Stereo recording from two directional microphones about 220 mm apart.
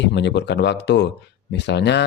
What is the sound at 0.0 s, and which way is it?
Speech, 50° left (ahead or behind).